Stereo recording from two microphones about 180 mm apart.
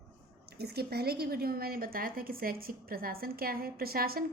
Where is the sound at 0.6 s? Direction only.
60° right (ahead or behind).